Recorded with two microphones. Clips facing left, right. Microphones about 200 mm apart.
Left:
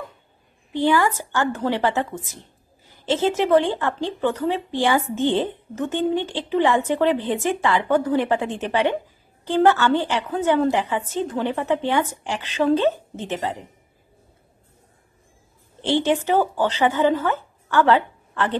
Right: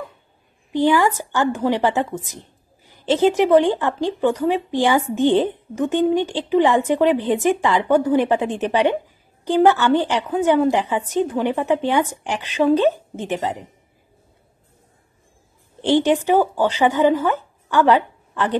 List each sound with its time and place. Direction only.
0.7 s a woman's voice: 15° right (ahead or behind)
15.8 s speech: 15° right (ahead or behind)